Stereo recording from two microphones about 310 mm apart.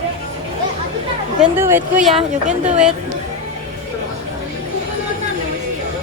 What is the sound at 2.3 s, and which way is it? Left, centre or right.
Speech, right.